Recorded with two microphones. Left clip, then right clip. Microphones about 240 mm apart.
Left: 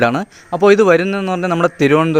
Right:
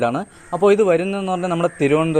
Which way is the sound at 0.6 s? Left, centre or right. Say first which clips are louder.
Left 4 dB; left.